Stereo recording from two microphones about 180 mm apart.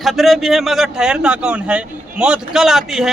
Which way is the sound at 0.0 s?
Centre (ahead or behind).